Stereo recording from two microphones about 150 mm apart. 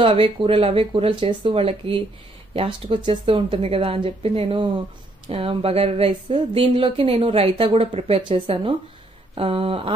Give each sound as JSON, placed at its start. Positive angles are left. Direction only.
{"t": 0.0, "sound": "speech", "side_deg": -35}